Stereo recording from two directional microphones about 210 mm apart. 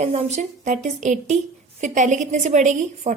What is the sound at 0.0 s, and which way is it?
A woman's voice, 30° right (ahead or behind).